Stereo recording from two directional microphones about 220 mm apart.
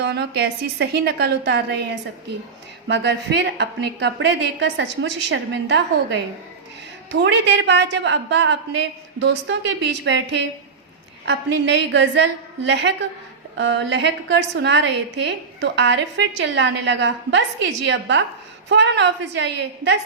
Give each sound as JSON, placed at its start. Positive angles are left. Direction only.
{"t": 0.0, "sound": "a woman's voice", "side_deg": -50}